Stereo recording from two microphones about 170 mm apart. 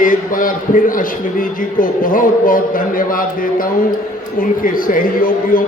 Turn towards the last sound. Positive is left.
turn(degrees=55)  # may be behind; listen again after turning